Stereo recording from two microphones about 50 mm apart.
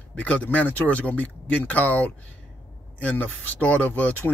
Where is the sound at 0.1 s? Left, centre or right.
Left.